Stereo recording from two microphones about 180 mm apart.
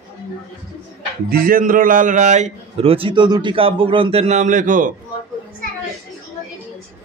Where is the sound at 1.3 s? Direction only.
50° right (ahead or behind).